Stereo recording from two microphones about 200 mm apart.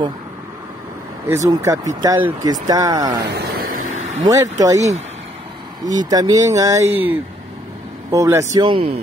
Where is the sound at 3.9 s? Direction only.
90° right.